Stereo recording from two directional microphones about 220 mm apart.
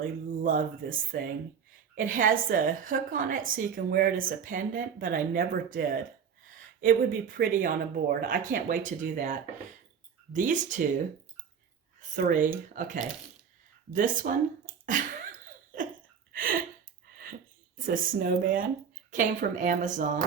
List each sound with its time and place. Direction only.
0.0 s speech: 40° right (ahead or behind)
2.0 s speech: 40° right (ahead or behind)
12.1 s speech: 35° right (ahead or behind)
14.8 s a sound: 35° right (ahead or behind)
15.7 s hiccup: 40° right (ahead or behind)
16.3 s a sound: 40° right (ahead or behind)
17.7 s speech: 40° right (ahead or behind)